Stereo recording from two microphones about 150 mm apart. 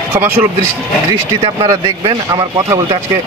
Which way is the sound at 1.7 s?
25° right (ahead or behind).